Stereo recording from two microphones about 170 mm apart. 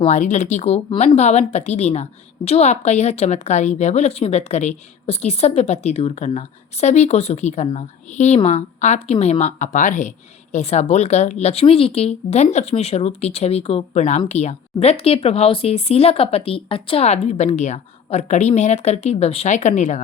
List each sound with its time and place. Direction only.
0.0 s speech: 45° left (ahead or behind)